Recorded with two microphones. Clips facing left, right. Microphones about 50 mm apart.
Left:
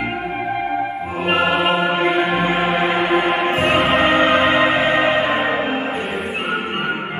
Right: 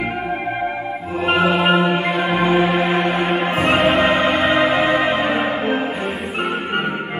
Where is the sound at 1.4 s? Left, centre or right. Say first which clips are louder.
Right 2 dB; centre.